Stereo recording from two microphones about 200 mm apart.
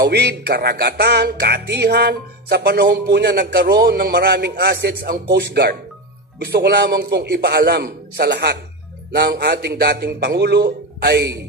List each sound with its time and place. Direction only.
0.0 s music: 55° right (ahead or behind)
5.3 s a man's voice: 55° right (ahead or behind)
9.1 s music: 55° right (ahead or behind)